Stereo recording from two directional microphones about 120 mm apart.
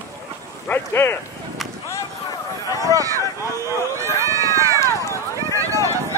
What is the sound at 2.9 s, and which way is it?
Run, 30° right (ahead or behind).